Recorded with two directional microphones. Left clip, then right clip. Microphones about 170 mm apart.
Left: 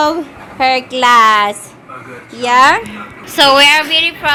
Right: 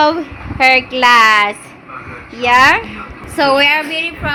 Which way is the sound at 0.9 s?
15° left (ahead or behind).